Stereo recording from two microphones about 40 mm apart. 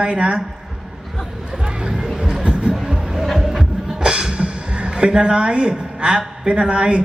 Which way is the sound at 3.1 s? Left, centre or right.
Centre.